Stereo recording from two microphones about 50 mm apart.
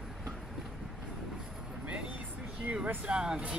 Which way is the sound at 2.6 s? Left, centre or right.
Right.